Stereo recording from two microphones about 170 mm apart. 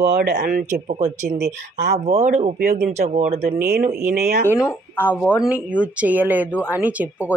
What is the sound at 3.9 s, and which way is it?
Speech, 60° right (ahead or behind).